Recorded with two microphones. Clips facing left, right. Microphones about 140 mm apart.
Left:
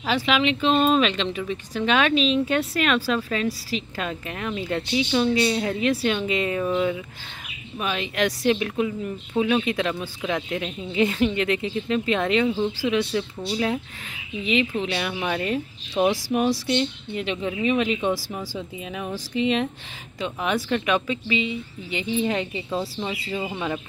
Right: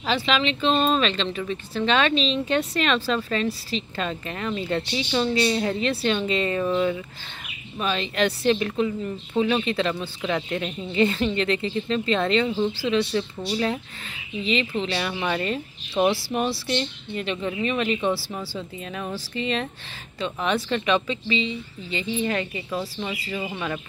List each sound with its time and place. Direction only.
0.0 s a woman's voice: 10° left (ahead or behind)